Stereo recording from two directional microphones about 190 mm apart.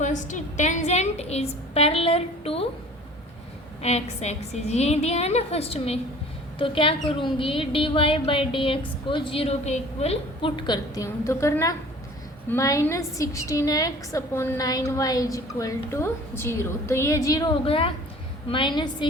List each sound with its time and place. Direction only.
0.0 s a woman's voice: 40° left (ahead or behind)
3.8 s a woman's voice: 35° left (ahead or behind)